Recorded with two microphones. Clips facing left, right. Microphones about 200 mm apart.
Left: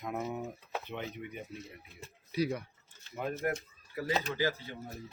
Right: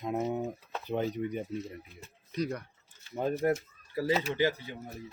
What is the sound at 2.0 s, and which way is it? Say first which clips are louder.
Speech: left 1 dB; 5° left (ahead or behind).